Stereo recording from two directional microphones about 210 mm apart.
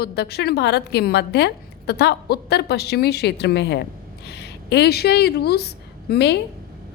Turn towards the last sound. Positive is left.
turn(degrees=50)  # may be behind; listen again after turning